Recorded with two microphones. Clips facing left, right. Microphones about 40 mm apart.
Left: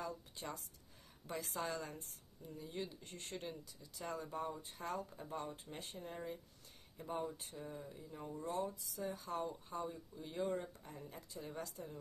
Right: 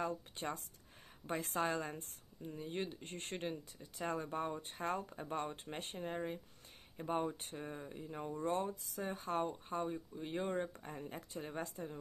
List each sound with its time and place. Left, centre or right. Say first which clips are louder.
0.0 s speech: right 6 dB; right